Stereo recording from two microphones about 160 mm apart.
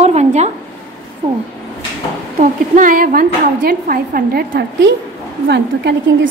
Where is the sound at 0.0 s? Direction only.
45° right (ahead or behind).